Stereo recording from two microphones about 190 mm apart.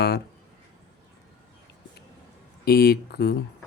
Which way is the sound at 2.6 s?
55° left (ahead or behind).